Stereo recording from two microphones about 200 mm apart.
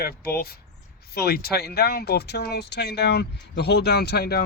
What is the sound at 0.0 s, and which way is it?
Speech, 50° left (ahead or behind).